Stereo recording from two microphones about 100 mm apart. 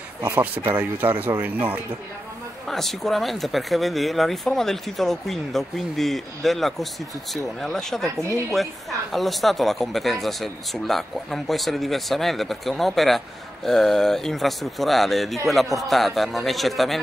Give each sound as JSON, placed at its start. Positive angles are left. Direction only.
{"t": 0.2, "sound": "speech", "side_deg": -20}
{"t": 2.7, "sound": "speech", "side_deg": 0}